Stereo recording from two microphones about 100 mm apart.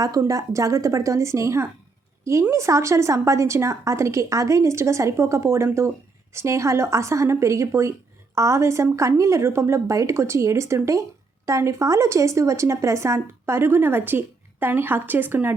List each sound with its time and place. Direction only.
0.0 s a woman's voice: 35° right (ahead or behind); by 15.5 s 20° right (ahead or behind)